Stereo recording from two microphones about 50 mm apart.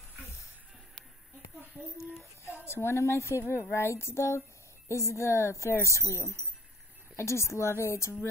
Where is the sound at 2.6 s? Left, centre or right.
Left.